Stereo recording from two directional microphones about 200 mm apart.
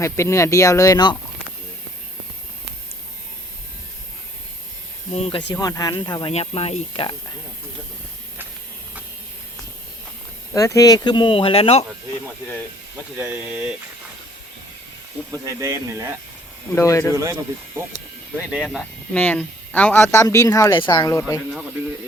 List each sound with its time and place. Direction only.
0.0 s speech: 15° left (ahead or behind)
5.1 s speech: 30° left (ahead or behind)
5.5 s speech: 15° left (ahead or behind)
10.5 s speech: 15° left (ahead or behind)
13.1 s speech: 10° right (ahead or behind)
15.3 s speech: 15° right (ahead or behind)
16.7 s speech: 15° left (ahead or behind)
17.1 s speech: 15° right (ahead or behind)
18.3 s speech: centre (ahead or behind); by 21.3 s 15° left (ahead or behind)